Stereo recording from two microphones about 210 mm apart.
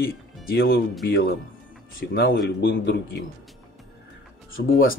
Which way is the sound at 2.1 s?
50° left (ahead or behind).